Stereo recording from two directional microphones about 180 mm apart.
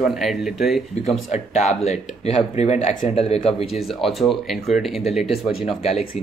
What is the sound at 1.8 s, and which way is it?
Speech, 35° left (ahead or behind).